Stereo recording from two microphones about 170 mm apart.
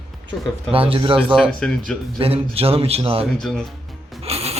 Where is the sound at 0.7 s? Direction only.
35° right (ahead or behind).